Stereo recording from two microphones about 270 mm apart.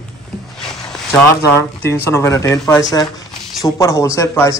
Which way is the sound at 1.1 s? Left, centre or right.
Centre.